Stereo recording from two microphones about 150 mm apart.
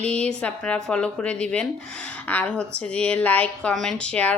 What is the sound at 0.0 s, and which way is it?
Speech, 5° left (ahead or behind).